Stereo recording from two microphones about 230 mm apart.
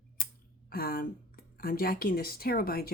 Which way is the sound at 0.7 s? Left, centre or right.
Left.